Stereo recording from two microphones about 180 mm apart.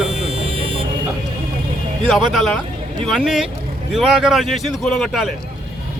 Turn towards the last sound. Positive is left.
turn(degrees=0)  # may be behind; listen again after turning